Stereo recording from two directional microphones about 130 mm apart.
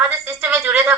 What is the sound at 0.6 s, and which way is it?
Speech, 5° right (ahead or behind).